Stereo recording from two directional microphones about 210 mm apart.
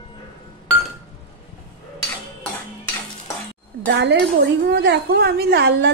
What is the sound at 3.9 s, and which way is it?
A woman's voice, 55° right (ahead or behind).